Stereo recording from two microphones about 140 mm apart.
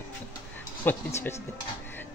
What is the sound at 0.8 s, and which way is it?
Speech, 15° left (ahead or behind).